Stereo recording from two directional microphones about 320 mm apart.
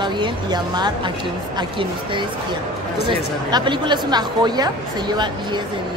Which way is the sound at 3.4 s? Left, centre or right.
Centre.